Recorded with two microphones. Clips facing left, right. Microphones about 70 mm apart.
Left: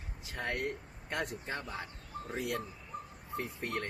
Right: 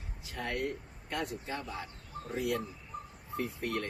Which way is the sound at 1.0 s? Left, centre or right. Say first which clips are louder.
Even; left.